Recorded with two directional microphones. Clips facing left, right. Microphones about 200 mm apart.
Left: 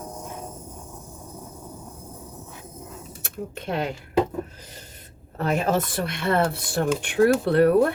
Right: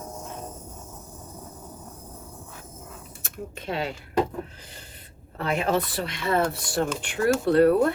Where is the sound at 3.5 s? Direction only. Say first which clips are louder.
Left 2 dB; 55° left (ahead or behind).